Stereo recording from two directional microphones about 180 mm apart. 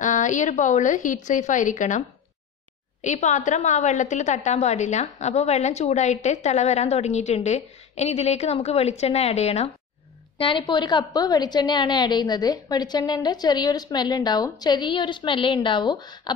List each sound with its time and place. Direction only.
0.0 s a woman's voice: 45° left (ahead or behind); by 16.3 s 25° left (ahead or behind)